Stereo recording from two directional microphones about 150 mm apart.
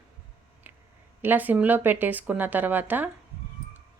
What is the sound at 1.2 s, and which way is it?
Speech, 10° right (ahead or behind).